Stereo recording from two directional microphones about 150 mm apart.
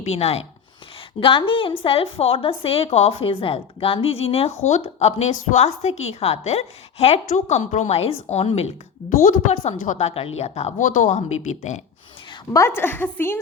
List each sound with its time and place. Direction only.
0.0 s a woman's voice: 45° left (ahead or behind)
7.3 s a woman's voice: 55° left (ahead or behind)
9.0 s a woman's voice: 60° left (ahead or behind)
12.5 s a woman's voice: 15° left (ahead or behind)